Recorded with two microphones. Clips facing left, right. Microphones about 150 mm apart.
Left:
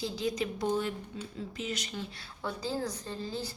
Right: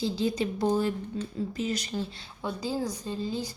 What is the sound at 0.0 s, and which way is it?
A woman's voice, 30° right (ahead or behind).